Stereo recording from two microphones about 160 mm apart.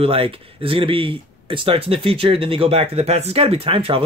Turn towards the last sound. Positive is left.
turn(degrees=-35)  # may be behind; listen again after turning